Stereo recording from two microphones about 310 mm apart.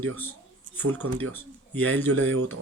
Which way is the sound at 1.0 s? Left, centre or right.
Right.